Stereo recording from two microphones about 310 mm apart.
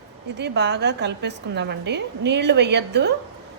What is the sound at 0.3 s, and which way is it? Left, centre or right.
A woman's voice, right.